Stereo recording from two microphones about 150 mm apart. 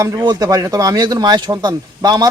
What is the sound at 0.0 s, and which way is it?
A man's voice, 20° right (ahead or behind).